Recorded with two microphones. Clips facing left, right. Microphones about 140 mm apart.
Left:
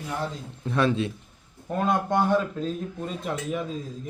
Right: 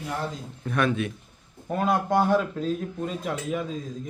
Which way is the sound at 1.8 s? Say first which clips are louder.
Right 1 dB; 5° right (ahead or behind).